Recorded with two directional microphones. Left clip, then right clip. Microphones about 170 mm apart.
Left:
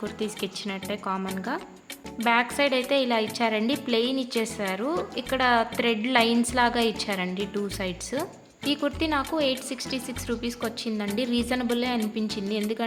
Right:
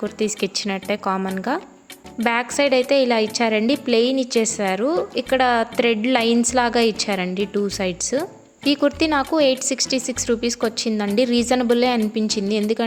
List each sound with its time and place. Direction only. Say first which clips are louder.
0.2 s a woman's voice: right 12 dB; 40° right (ahead or behind)
8.6 s speech: right 8 dB; 40° right (ahead or behind)